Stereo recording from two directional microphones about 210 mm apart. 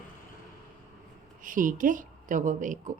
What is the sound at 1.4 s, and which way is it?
A woman's voice, 40° right (ahead or behind).